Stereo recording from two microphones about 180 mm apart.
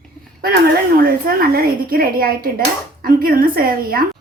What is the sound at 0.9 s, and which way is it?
Speech, 55° right (ahead or behind).